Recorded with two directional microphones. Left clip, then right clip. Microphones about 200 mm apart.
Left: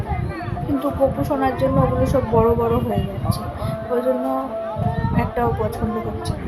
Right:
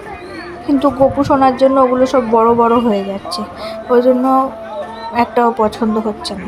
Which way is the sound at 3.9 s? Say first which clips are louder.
Right 10 dB; 30° right (ahead or behind).